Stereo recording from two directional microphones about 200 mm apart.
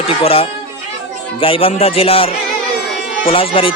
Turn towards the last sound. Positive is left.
turn(degrees=25)  # may be behind; listen again after turning